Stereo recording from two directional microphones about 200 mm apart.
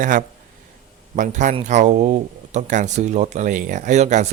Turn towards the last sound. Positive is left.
turn(degrees=-35)  # may be behind; listen again after turning